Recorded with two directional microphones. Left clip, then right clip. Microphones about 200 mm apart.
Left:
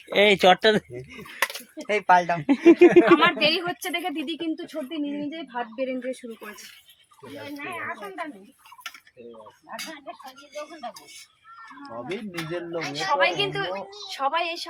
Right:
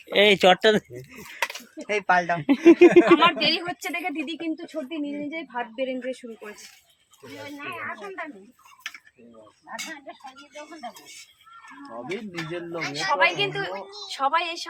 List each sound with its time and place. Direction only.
0.1 s a woman's voice: 10° right (ahead or behind)
1.4 s speech: 25° left (ahead or behind)
2.4 s a woman's voice: 5° right (ahead or behind)
9.6 s a woman's voice: 10° right (ahead or behind)
11.8 s speech: 10° left (ahead or behind)
12.7 s a woman's voice: 10° right (ahead or behind)